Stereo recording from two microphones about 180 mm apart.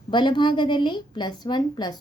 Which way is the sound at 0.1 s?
25° left (ahead or behind).